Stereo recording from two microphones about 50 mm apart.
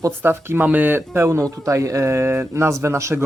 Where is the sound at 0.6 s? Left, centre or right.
Right.